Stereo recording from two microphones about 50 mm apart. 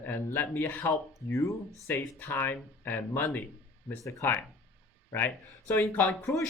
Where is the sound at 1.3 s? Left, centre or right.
Left.